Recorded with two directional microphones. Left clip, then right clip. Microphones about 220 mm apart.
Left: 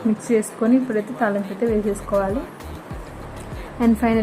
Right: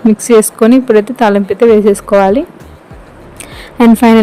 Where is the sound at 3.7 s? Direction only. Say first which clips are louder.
Right 13 dB; 50° right (ahead or behind).